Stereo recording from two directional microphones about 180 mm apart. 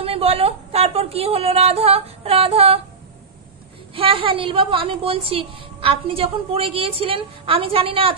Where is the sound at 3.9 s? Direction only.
30° right (ahead or behind).